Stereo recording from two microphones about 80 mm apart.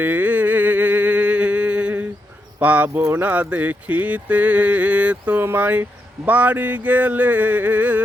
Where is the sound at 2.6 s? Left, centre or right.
Centre.